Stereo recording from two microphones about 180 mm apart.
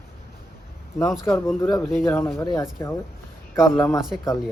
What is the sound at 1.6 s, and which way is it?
Speech, 15° left (ahead or behind).